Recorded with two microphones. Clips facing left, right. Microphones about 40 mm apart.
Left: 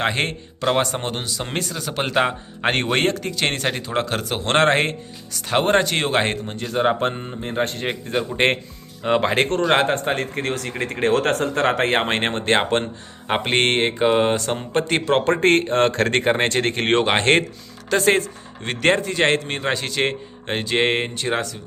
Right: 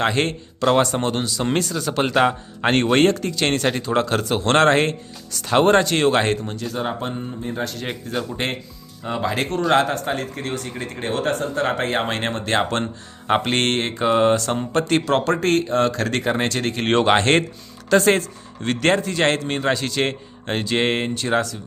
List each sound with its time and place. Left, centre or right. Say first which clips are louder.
0.0 s speech: right 2 dB; centre
5.4 s speech: right 2 dB; centre
6.8 s speech: left 7 dB; left
7.9 s speech: left 3 dB; left
9.0 s speech: left 5 dB; left
9.3 s speech: left 4 dB; left
9.7 s speech: right 2 dB; left
12.8 s speech: right 2 dB; centre; by 17.0 s left
17.0 s speech: right 3 dB; centre